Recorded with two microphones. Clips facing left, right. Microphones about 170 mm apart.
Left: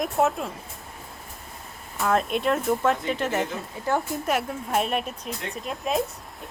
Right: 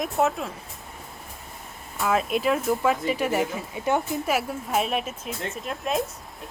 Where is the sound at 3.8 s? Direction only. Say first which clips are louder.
Right 1 dB; 20° right (ahead or behind).